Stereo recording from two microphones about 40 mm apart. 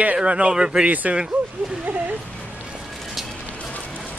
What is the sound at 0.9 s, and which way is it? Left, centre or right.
Speech, right.